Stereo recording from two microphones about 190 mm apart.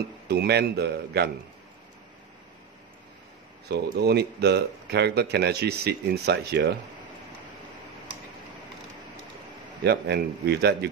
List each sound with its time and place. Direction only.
0.3 s speech: 60° right (ahead or behind)
3.6 s speech: 60° right (ahead or behind)
9.8 s speech: 60° right (ahead or behind)